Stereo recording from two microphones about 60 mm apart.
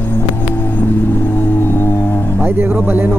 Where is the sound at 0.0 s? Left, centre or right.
Left.